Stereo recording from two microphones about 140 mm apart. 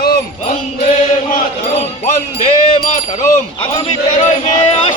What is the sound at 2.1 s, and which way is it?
Jingle bell, 45° left (ahead or behind).